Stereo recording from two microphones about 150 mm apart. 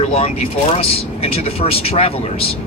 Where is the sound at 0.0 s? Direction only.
40° left (ahead or behind).